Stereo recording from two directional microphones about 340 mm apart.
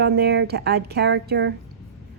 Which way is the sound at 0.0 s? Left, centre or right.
Right.